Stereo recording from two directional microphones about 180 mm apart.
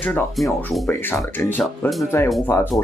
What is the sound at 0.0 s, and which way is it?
Speech, 10° left (ahead or behind).